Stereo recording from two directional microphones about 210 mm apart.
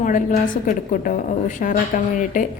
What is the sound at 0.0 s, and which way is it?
A woman's voice, 40° left (ahead or behind).